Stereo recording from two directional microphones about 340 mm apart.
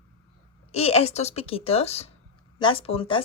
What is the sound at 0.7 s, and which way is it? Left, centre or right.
Speech, centre.